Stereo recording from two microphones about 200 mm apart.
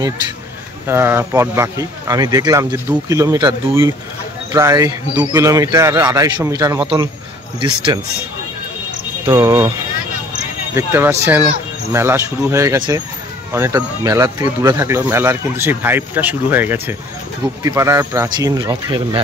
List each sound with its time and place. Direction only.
0.8 s speech: 10° right (ahead or behind)
9.2 s speech: 15° right (ahead or behind)
10.7 s speech: 15° right (ahead or behind)